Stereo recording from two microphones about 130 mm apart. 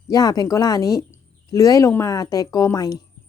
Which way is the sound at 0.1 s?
30° left (ahead or behind).